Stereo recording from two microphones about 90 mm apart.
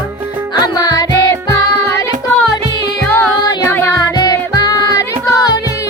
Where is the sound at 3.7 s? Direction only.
25° left (ahead or behind).